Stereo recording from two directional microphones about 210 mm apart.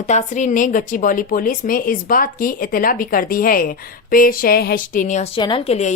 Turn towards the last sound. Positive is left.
turn(degrees=30)  # may be behind; listen again after turning